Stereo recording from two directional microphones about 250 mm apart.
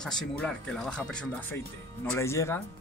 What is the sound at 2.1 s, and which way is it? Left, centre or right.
Speech, centre.